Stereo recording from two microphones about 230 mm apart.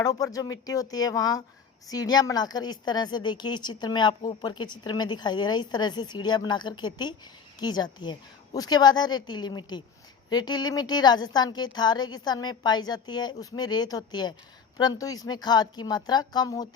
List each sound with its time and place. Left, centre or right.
0.0 s a woman's voice: centre